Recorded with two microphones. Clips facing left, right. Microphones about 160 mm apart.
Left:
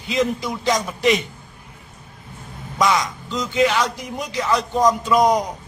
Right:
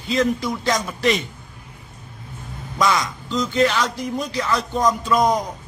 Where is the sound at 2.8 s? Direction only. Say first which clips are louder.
Left 1 dB; 15° left (ahead or behind).